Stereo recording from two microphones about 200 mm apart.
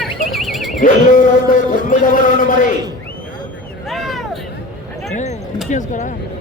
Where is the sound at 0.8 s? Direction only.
40° left (ahead or behind).